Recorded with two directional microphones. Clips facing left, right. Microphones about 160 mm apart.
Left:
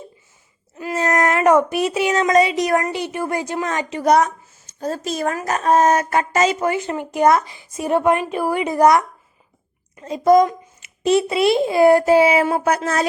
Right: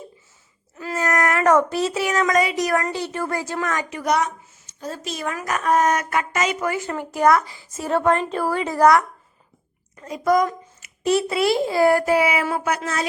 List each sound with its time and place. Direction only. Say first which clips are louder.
0.8 s a woman's voice: left 3 dB; 20° left (ahead or behind)
4.8 s speech: left 6 dB; 40° left (ahead or behind)
5.4 s a woman's voice: left 3 dB; 30° left (ahead or behind)
12.6 s speech: left 5 dB; 40° left (ahead or behind)